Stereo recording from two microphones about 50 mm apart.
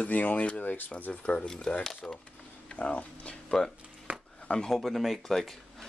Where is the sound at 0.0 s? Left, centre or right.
Left.